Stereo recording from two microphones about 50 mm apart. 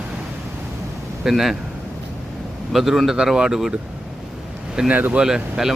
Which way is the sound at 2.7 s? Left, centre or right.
Centre.